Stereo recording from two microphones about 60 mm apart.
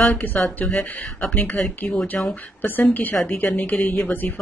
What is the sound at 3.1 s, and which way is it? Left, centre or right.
Speech, centre.